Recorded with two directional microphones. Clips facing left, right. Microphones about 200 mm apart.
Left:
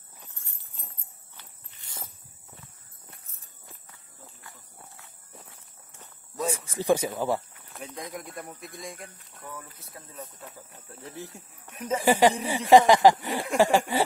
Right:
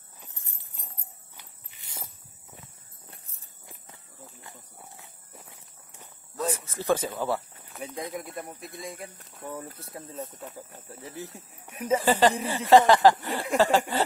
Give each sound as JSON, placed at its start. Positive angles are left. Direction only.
{"t": 0.2, "sound": "a sound", "side_deg": -20}
{"t": 3.1, "sound": "a sound", "side_deg": -30}
{"t": 3.6, "sound": "walk", "side_deg": -25}
{"t": 6.3, "sound": "speech", "side_deg": 15}
{"t": 7.7, "sound": "a sound", "side_deg": -5}
{"t": 8.1, "sound": "speech", "side_deg": 0}
{"t": 9.4, "sound": "speech", "side_deg": -30}
{"t": 10.7, "sound": "speech", "side_deg": -5}
{"t": 12.0, "sound": "speech", "side_deg": 10}